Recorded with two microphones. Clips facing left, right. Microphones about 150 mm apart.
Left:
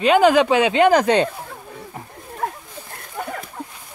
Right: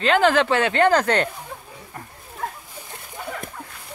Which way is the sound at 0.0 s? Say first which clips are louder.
Left 4 dB; 15° left (ahead or behind).